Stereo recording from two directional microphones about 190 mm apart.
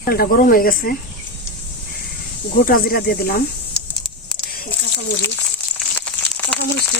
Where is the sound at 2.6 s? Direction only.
50° left (ahead or behind).